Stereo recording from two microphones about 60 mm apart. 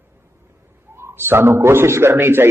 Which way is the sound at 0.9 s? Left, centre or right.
Right.